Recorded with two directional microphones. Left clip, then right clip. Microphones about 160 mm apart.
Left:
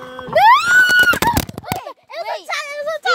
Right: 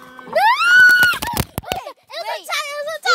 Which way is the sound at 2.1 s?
45° right (ahead or behind).